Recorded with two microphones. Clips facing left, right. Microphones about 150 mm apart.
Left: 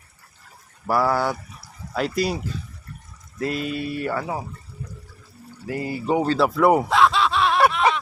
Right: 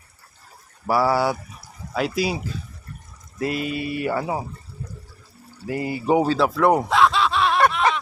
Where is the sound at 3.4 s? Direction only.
5° right (ahead or behind).